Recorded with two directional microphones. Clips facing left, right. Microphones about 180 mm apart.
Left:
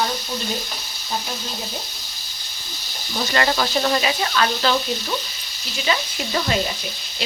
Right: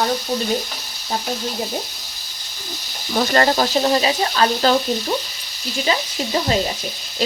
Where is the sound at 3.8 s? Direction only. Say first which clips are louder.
Right 3 dB; 25° right (ahead or behind).